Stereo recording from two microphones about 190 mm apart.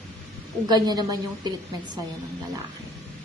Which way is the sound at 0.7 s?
20° right (ahead or behind).